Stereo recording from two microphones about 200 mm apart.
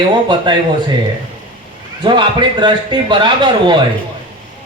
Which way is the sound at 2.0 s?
25° right (ahead or behind).